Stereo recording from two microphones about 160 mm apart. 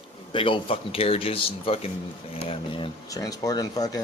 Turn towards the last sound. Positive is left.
turn(degrees=20)  # may be behind; listen again after turning